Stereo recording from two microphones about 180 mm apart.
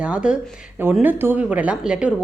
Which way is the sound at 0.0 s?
5° right (ahead or behind).